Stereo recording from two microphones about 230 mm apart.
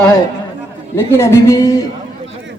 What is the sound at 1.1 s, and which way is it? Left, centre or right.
Music, centre.